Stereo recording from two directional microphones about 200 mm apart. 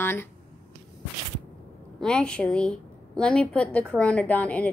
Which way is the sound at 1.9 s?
5° left (ahead or behind).